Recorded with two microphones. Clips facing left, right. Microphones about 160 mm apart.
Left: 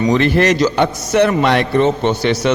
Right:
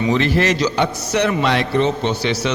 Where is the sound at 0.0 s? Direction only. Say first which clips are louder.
Left 4 dB; 50° left (ahead or behind).